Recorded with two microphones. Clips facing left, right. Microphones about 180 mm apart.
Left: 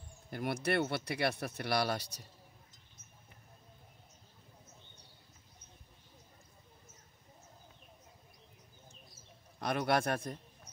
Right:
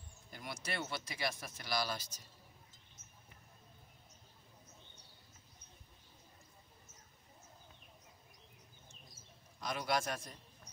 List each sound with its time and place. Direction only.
0.3 s speech: 60° left (ahead or behind)
9.6 s speech: 60° left (ahead or behind)